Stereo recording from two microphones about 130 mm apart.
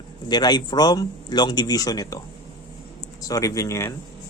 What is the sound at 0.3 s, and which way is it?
Speech, 30° left (ahead or behind).